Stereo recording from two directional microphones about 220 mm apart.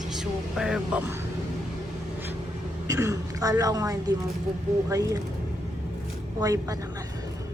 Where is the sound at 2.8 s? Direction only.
15° right (ahead or behind).